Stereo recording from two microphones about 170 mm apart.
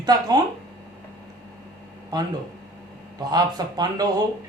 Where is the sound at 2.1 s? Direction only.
25° right (ahead or behind).